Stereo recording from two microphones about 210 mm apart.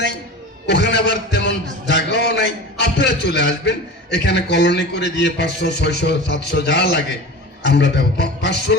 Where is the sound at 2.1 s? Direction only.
55° left (ahead or behind).